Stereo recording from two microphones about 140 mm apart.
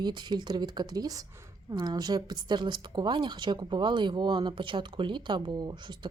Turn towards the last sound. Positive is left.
turn(degrees=-35)  # may be behind; listen again after turning